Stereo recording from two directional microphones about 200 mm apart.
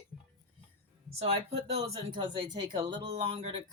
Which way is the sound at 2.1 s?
25° right (ahead or behind).